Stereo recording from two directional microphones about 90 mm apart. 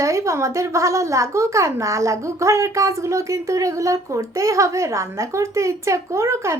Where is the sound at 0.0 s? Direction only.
35° right (ahead or behind).